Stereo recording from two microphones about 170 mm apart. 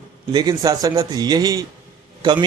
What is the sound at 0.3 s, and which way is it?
A man's voice, 25° right (ahead or behind).